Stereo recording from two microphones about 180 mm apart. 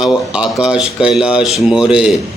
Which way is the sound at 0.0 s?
5° right (ahead or behind).